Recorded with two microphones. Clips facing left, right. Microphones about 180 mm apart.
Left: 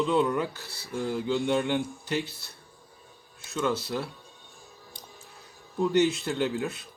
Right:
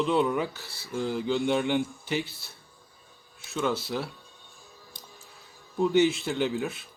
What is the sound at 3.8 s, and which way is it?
Speech, centre (ahead or behind).